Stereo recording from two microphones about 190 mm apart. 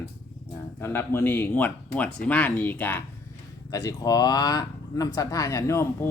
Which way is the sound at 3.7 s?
20° left (ahead or behind).